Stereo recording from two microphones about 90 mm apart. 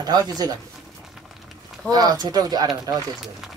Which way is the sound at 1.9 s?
45° right (ahead or behind).